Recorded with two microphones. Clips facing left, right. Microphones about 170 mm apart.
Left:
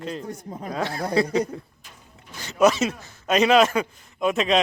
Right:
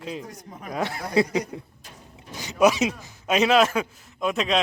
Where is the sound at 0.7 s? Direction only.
20° right (ahead or behind); by 4.6 s centre (ahead or behind).